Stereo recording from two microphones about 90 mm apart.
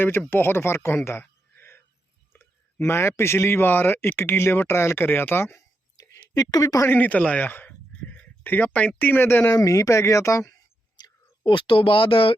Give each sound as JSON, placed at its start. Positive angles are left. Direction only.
{"t": 0.0, "sound": "speech", "side_deg": 25}
{"t": 6.0, "sound": "a sound", "side_deg": 40}
{"t": 6.8, "sound": "speech", "side_deg": 20}
{"t": 9.5, "sound": "speech", "side_deg": 40}
{"t": 10.9, "sound": "speech", "side_deg": 55}